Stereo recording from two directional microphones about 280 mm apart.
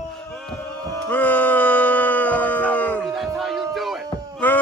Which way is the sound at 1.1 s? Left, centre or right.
Centre.